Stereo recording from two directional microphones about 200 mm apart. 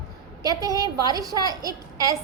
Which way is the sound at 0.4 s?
20° right (ahead or behind).